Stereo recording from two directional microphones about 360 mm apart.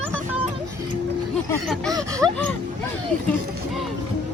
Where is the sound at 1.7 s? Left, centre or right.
Centre.